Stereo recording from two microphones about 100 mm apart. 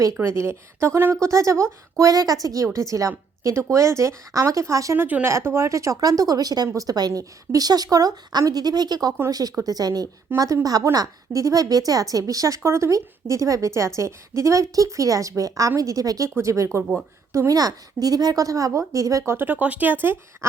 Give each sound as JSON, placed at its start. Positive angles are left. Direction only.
{"t": 0.2, "sound": "a woman's voice", "side_deg": -25}
{"t": 4.9, "sound": "a woman's voice", "side_deg": -20}